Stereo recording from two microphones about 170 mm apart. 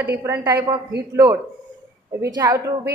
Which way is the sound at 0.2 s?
15° right (ahead or behind).